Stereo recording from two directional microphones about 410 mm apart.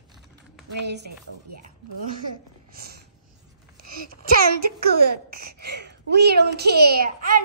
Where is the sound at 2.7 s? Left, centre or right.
Right.